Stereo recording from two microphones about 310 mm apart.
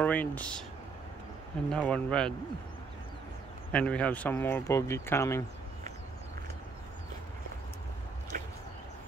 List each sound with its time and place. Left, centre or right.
0.0 s speech: centre
1.7 s speech: centre
3.7 s speech: centre
8.3 s a sound: right